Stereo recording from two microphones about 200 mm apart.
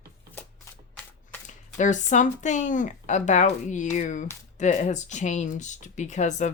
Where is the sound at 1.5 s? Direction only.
40° left (ahead or behind).